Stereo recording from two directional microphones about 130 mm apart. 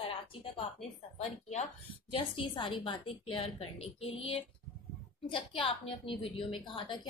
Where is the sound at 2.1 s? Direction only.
40° left (ahead or behind).